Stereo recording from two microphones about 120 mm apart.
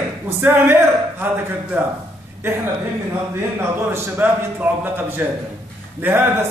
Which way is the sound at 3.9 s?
20° right (ahead or behind).